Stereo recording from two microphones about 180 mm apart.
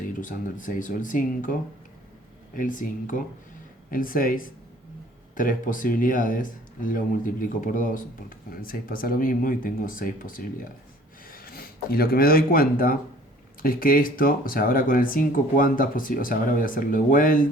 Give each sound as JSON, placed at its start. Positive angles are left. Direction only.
{"t": 0.2, "sound": "speech", "side_deg": 45}